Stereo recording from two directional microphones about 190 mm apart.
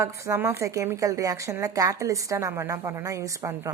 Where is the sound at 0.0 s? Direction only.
15° right (ahead or behind).